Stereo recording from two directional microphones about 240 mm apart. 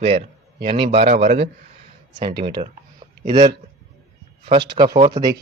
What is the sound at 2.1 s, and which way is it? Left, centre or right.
A man's voice, centre.